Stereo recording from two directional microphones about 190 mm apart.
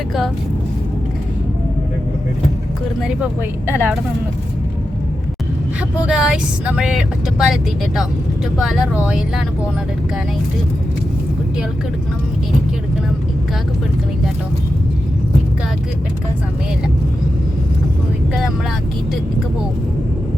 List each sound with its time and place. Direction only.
3.7 s speech: 10° right (ahead or behind)
6.1 s speech: 5° right (ahead or behind)